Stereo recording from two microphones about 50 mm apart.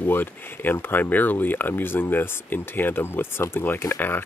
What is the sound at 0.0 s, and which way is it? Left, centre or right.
Speech, left.